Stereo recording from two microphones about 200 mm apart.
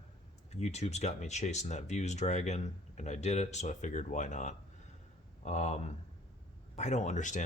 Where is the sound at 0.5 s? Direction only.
35° left (ahead or behind).